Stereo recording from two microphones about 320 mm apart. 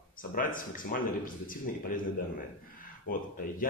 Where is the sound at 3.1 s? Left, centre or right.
Left.